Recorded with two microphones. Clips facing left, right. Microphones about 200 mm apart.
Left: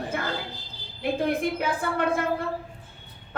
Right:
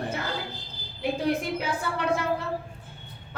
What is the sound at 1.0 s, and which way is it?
A woman's voice, 55° left (ahead or behind).